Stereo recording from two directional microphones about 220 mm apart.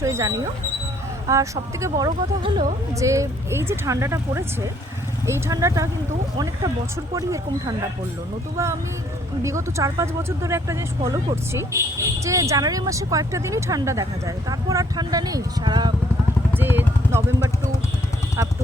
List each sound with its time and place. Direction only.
0.0 s speech: 15° right (ahead or behind)
9.4 s speech: 15° right (ahead or behind)
16.6 s a sound: 10° right (ahead or behind)